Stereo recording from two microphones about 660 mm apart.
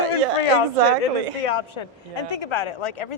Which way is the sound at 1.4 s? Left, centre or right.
Left.